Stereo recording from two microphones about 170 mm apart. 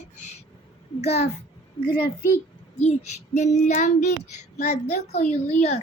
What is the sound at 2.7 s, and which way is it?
Child singing, 40° left (ahead or behind).